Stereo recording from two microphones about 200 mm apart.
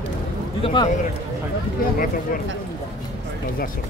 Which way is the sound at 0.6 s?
25° left (ahead or behind).